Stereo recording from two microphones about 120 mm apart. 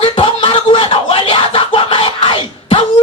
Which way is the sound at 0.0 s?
45° left (ahead or behind).